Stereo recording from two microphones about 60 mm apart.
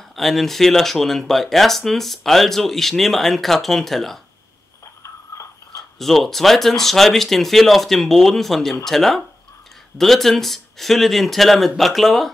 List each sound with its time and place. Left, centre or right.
0.1 s speech: centre
5.3 s a sound: left
5.8 s speech: centre